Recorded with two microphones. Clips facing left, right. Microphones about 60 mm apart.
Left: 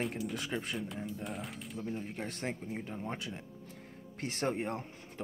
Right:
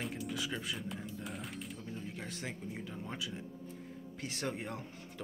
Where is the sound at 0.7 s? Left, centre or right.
Centre.